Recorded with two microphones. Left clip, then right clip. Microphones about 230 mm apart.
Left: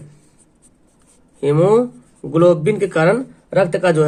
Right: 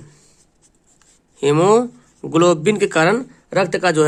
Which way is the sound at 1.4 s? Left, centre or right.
Right.